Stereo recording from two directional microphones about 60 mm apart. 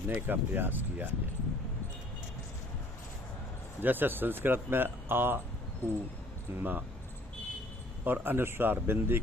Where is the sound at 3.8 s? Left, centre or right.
Right.